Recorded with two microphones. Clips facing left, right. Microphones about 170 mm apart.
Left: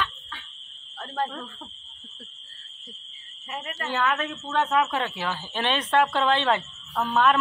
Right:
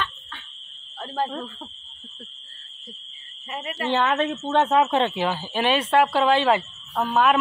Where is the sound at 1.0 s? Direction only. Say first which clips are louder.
Right 2 dB; centre (ahead or behind).